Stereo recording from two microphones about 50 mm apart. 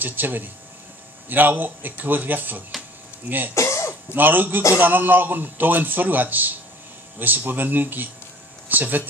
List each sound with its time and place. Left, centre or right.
0.0 s a man's voice: right
3.5 s throat clearing: left
4.1 s a man's voice: right